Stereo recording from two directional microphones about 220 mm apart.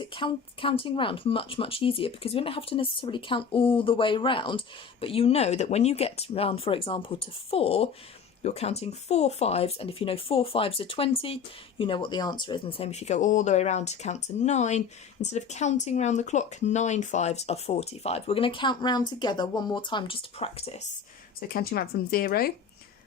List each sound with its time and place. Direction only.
0.0 s speech: 20° left (ahead or behind)
21.4 s speech: 45° left (ahead or behind)